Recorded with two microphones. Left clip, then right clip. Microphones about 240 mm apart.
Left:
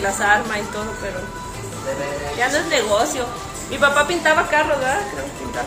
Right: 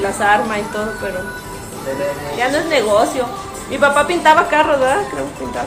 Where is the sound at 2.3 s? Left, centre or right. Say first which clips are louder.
Right 3 dB; centre.